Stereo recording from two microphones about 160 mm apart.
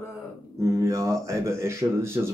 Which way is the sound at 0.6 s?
20° right (ahead or behind).